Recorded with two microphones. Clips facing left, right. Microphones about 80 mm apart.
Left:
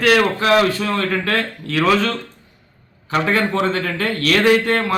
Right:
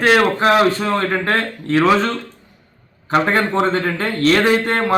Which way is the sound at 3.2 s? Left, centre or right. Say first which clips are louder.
Right 2 dB; right.